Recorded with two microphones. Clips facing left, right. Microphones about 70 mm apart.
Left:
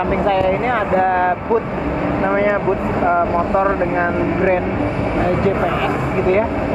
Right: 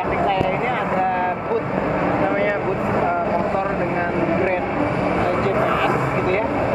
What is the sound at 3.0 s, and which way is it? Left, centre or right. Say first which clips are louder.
Vehicle: left 4 dB; left.